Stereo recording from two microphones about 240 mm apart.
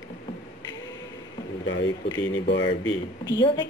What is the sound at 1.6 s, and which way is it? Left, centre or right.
Speech, left.